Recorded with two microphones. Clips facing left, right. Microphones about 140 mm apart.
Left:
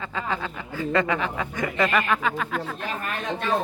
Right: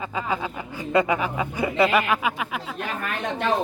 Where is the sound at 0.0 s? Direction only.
10° right (ahead or behind).